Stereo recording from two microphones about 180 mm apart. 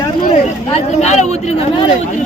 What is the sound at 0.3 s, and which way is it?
Speech, 35° left (ahead or behind).